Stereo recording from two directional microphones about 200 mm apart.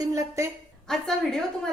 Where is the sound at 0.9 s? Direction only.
Centre (ahead or behind).